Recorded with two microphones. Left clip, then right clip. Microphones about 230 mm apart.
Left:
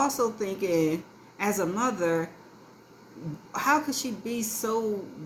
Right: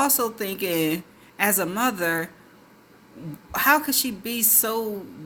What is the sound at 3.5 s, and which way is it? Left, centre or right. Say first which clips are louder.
A woman's voice: right 5 dB; right.